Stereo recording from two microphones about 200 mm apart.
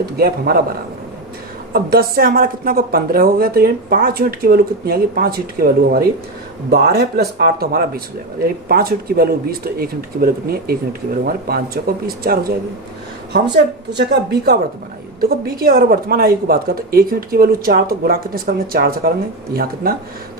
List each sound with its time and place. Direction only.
0.0 s a woman's voice: 50° right (ahead or behind)
1.7 s a woman's voice: 50° right (ahead or behind)
13.9 s a woman's voice: 55° right (ahead or behind)